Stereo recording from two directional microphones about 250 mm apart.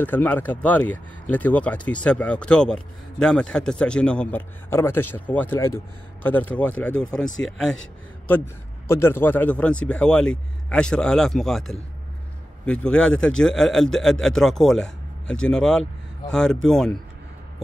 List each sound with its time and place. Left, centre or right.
0.0 s speech: centre
8.8 s speech: centre